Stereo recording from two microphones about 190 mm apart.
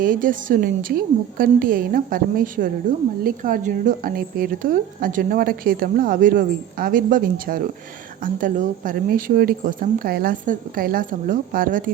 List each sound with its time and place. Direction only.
0.0 s a woman's voice: 45° right (ahead or behind)